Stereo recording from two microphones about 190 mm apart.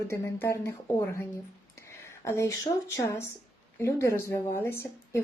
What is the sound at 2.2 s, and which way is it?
Speech, 15° left (ahead or behind).